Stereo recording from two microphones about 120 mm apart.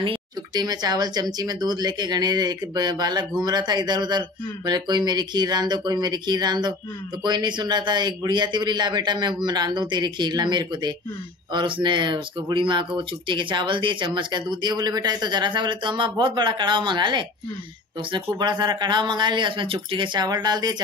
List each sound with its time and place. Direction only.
0.0 s speech: 40° right (ahead or behind)